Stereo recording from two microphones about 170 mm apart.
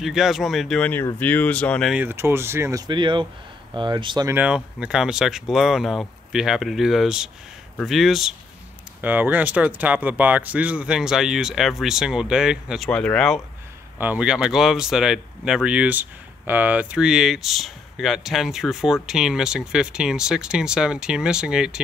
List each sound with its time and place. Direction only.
0.0 s speech: centre (ahead or behind)
2.0 s speech: 15° right (ahead or behind)
2.9 s speech: 30° right (ahead or behind)
4.3 s speech: 10° right (ahead or behind)
13.9 s speech: 10° right (ahead or behind)